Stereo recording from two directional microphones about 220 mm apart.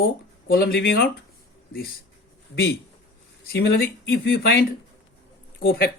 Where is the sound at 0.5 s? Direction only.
45° left (ahead or behind).